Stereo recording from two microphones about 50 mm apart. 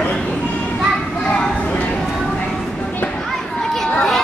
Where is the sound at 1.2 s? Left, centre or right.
Left.